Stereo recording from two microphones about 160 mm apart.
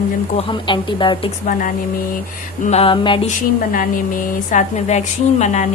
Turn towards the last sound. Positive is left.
turn(degrees=45)  # may be behind; listen again after turning